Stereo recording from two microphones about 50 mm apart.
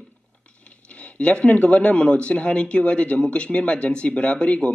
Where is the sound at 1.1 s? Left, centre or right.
Left.